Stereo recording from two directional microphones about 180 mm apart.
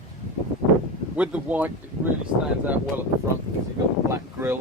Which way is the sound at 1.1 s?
5° right (ahead or behind).